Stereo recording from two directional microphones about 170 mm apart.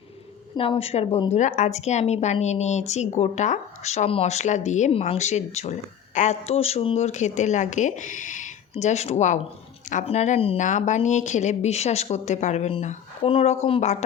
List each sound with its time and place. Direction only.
0.5 s a woman's voice: 30° left (ahead or behind)